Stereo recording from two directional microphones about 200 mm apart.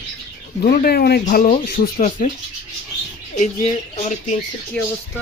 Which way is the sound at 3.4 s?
35° left (ahead or behind).